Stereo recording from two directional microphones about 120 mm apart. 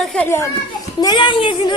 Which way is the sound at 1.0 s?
35° left (ahead or behind).